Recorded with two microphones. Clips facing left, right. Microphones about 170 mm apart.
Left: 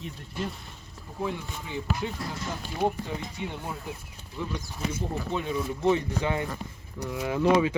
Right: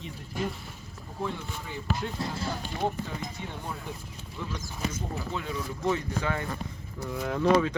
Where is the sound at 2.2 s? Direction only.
25° right (ahead or behind).